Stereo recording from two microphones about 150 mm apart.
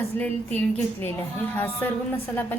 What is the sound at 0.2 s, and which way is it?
Speech, 10° left (ahead or behind).